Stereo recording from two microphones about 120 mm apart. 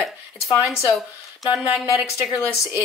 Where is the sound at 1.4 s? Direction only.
30° left (ahead or behind).